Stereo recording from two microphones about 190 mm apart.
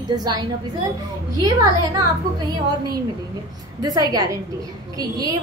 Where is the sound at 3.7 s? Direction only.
20° right (ahead or behind).